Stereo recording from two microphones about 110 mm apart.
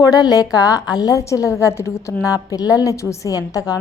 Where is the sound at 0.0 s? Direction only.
35° left (ahead or behind).